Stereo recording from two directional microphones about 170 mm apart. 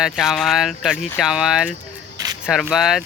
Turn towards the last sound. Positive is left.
turn(degrees=0)  # may be behind; listen again after turning